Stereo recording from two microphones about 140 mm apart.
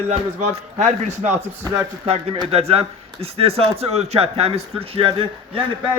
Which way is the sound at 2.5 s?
45° right (ahead or behind).